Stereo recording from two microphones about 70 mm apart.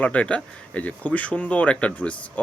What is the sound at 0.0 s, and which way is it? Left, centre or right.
Speech, left.